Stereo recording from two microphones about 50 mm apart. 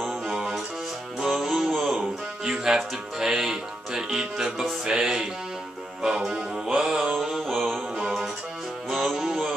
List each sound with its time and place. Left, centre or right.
0.0 s music: centre
2.4 s speech: centre
4.8 s music: centre